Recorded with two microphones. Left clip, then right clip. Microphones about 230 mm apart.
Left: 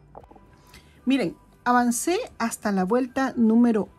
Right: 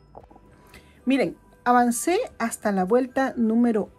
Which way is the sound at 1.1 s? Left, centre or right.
Centre.